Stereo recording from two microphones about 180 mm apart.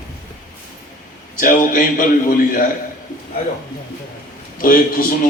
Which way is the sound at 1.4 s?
50° left (ahead or behind).